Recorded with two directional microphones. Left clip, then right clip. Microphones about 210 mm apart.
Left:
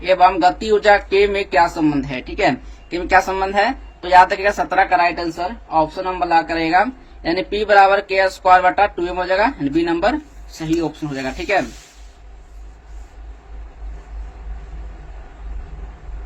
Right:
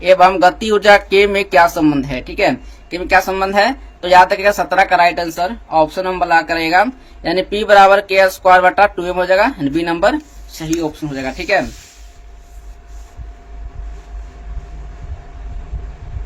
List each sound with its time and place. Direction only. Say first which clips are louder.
0.0 s speech: right 4 dB; 25° right (ahead or behind)